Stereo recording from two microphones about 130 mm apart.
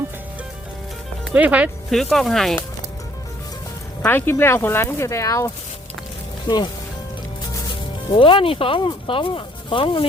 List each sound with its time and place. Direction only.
1.2 s speech: 10° right (ahead or behind)
1.9 s speech: centre (ahead or behind)
4.0 s speech: 15° left (ahead or behind)
6.5 s speech: 35° left (ahead or behind)
8.1 s speech: 40° left (ahead or behind)